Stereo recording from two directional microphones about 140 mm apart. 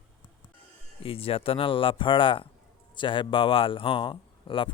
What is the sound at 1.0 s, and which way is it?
A man's voice, 40° left (ahead or behind).